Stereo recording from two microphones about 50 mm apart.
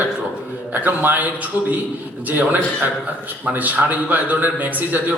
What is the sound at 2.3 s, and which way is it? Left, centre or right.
Speech, right.